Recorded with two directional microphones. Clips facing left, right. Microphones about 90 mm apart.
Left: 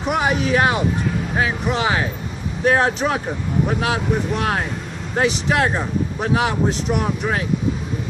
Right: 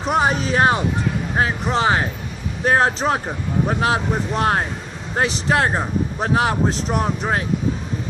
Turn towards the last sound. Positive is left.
turn(degrees=-40)  # may be behind; listen again after turning